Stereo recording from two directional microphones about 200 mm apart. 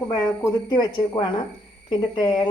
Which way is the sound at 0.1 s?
20° left (ahead or behind).